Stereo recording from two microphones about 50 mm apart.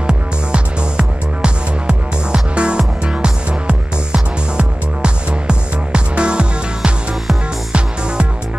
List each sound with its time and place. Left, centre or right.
0.0 s music: centre